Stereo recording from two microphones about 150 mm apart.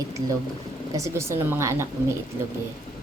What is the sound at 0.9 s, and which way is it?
Speech, 20° right (ahead or behind).